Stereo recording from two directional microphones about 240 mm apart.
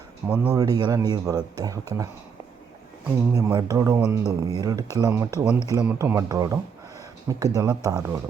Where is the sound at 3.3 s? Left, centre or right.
Centre.